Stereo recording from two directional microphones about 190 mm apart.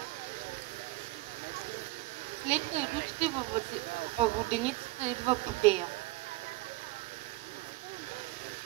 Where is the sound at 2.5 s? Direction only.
35° right (ahead or behind).